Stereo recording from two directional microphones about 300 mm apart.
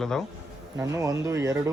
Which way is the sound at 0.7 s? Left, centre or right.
Centre.